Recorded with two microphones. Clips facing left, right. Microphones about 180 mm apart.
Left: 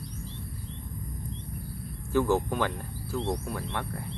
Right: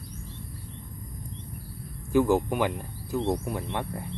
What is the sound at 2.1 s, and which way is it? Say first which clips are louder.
Speech: right 3 dB; 15° right (ahead or behind).